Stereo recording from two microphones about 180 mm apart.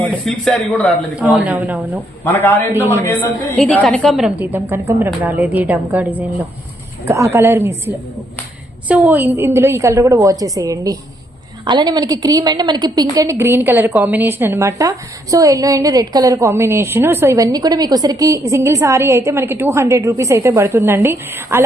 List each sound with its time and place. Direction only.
0.0 s a man's voice: 5° left (ahead or behind)
1.1 s a woman's voice: 10° right (ahead or behind)
2.2 s a man's voice: 10° left (ahead or behind); by 7.7 s 15° right (ahead or behind)
8.9 s a woman's voice: 10° right (ahead or behind)